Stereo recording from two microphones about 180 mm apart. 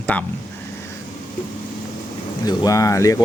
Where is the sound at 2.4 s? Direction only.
20° left (ahead or behind).